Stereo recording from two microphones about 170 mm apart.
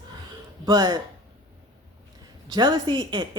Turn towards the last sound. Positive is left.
turn(degrees=-25)  # may be behind; listen again after turning